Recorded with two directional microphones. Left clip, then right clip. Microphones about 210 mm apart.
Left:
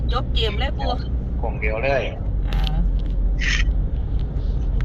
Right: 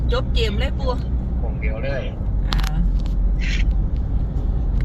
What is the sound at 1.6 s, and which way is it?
Speech, 35° left (ahead or behind).